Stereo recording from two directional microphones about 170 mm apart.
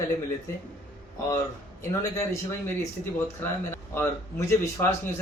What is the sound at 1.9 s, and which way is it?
Speech, 15° left (ahead or behind).